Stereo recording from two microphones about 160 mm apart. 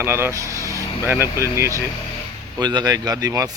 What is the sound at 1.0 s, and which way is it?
A man's voice, 15° right (ahead or behind).